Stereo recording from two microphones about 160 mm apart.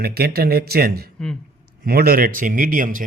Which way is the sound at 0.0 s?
75° right (ahead or behind).